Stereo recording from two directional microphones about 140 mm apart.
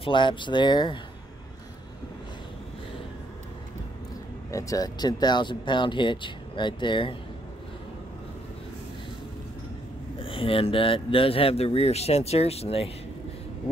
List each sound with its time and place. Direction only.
0.0 s speech: 35° left (ahead or behind)
4.5 s speech: 25° left (ahead or behind)
10.1 s speech: 40° left (ahead or behind)